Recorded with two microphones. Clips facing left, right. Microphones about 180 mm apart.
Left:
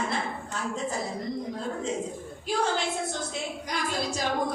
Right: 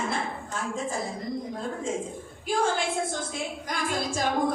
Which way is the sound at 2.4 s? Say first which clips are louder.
Right 2 dB; 50° right (ahead or behind).